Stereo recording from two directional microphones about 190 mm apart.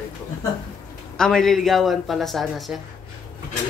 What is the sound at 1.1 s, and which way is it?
Speech, 5° left (ahead or behind).